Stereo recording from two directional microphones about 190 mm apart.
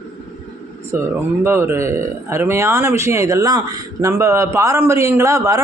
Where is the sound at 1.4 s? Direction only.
15° right (ahead or behind).